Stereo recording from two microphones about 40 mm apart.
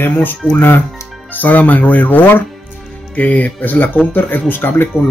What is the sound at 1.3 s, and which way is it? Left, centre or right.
Speech, left.